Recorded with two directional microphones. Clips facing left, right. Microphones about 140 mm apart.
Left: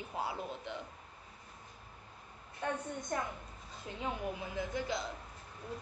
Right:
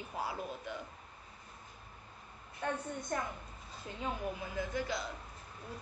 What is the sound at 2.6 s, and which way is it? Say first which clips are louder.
Speech: even; 15° left (ahead or behind).